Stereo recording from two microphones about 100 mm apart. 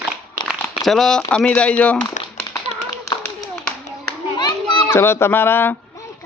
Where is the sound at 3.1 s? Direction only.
30° left (ahead or behind).